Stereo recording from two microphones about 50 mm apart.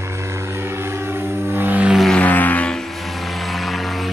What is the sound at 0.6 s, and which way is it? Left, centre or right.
Vehicle, right.